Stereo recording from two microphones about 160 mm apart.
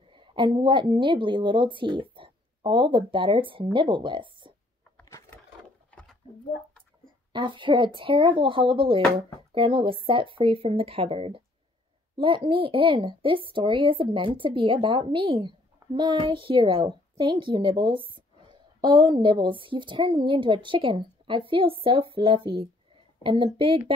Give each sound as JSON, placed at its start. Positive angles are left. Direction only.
{"t": 0.1, "sound": "a woman's voice", "side_deg": -30}
{"t": 6.2, "sound": "a sound", "side_deg": -30}
{"t": 7.3, "sound": "a woman's voice", "side_deg": -30}